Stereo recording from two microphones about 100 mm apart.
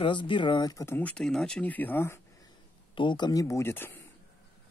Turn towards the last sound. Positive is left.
turn(degrees=20)  # may be behind; listen again after turning